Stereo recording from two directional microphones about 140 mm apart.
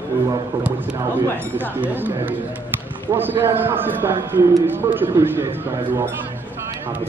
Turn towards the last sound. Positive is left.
turn(degrees=-15)  # may be behind; listen again after turning